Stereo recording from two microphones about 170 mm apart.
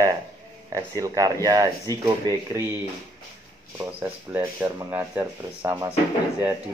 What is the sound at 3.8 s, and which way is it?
Speech, 15° right (ahead or behind).